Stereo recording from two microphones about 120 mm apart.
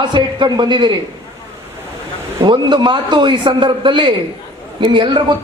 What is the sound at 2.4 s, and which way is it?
A man's voice, 40° right (ahead or behind).